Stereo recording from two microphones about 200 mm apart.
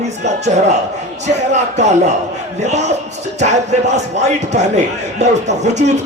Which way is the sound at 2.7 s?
35° right (ahead or behind).